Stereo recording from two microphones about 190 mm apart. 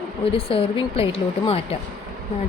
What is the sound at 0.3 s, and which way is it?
A woman's voice, 30° left (ahead or behind).